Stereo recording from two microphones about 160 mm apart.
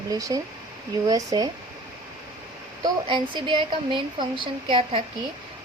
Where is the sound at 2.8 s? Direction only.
30° right (ahead or behind).